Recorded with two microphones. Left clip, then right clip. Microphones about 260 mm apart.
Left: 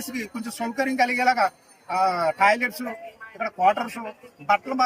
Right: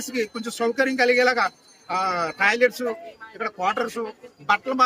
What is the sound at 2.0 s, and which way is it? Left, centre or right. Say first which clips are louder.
Speech: left 3 dB; centre.